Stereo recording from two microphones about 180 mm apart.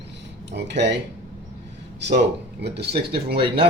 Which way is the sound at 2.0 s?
70° right (ahead or behind).